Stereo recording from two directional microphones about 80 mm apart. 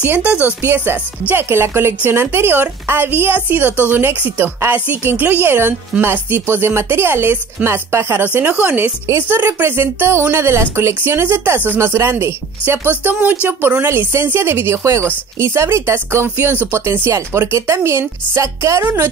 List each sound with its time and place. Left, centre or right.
1.3 s a woman's voice: right